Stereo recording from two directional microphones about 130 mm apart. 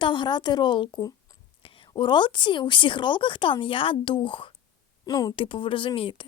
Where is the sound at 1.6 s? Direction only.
40° left (ahead or behind).